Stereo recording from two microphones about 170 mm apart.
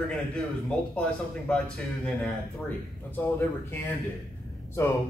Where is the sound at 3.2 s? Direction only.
10° left (ahead or behind).